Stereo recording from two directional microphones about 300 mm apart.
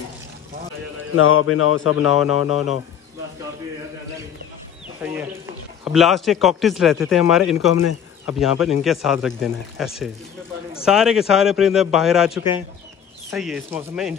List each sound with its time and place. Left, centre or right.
1.1 s speech: left
2.1 s a man's voice: centre
5.0 s a man's voice: centre
7.7 s speech: left
8.6 s a man's voice: centre